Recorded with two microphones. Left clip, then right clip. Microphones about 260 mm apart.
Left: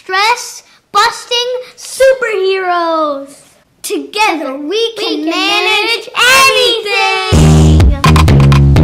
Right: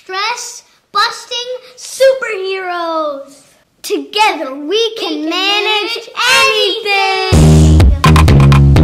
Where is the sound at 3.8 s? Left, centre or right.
Right.